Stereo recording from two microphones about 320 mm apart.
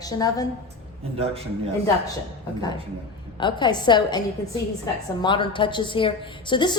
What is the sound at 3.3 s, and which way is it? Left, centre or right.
Speech, centre.